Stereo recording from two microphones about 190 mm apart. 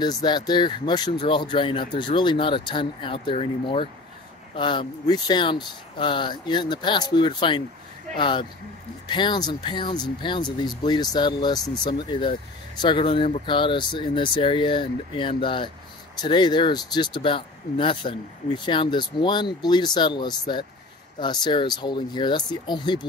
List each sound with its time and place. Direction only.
0.0 s speech: 20° left (ahead or behind)